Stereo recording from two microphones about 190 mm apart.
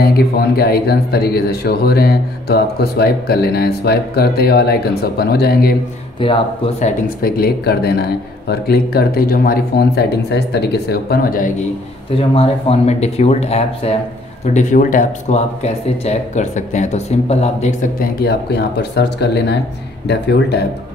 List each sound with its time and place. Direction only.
0.6 s a man's voice: 55° left (ahead or behind)
6.1 s speech: 25° left (ahead or behind)
7.2 s a man's voice: 50° left (ahead or behind)
12.2 s speech: 30° left (ahead or behind)
18.2 s a man's voice: 60° left (ahead or behind)